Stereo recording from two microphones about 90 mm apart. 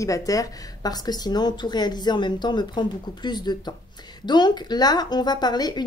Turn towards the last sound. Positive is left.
turn(degrees=50)  # may be behind; listen again after turning